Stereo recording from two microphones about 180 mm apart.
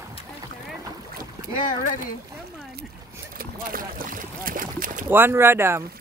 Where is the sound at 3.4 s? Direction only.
50° right (ahead or behind).